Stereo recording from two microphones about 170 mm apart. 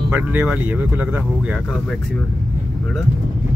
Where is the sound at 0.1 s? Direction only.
10° right (ahead or behind).